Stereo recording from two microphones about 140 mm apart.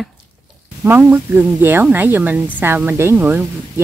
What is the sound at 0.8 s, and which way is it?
A woman's voice, 15° right (ahead or behind).